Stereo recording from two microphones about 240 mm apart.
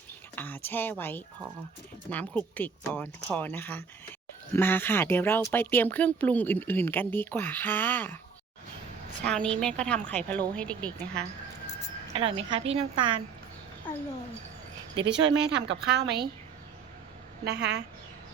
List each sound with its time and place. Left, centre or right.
0.3 s speech: centre
9.2 s speech: centre
12.1 s a woman's voice: right
15.1 s a woman's voice: right
17.4 s a woman's voice: right